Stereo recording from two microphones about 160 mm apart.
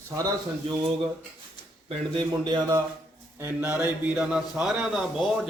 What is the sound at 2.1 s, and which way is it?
Speech, 25° right (ahead or behind).